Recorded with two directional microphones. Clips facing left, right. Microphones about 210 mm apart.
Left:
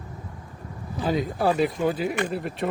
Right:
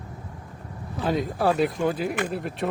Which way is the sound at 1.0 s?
Centre (ahead or behind).